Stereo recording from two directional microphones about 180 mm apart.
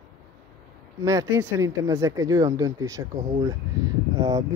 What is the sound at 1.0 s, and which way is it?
Speech, 20° right (ahead or behind).